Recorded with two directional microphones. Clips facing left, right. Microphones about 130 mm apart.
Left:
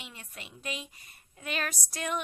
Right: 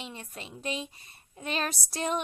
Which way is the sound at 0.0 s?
30° right (ahead or behind).